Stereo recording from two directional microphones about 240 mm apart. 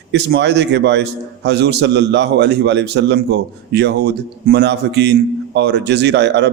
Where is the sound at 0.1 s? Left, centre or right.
Right.